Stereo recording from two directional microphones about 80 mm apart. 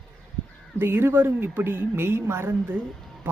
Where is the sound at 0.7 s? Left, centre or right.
Right.